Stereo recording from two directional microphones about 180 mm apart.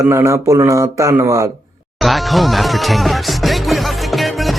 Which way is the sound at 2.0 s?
Centre (ahead or behind).